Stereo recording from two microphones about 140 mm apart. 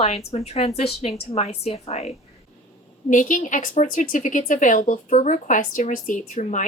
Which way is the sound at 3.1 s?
65° left (ahead or behind).